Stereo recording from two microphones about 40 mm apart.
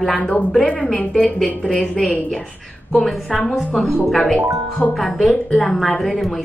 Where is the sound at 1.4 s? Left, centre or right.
Centre.